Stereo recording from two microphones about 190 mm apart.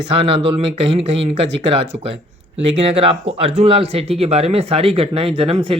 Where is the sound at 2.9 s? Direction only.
30° right (ahead or behind).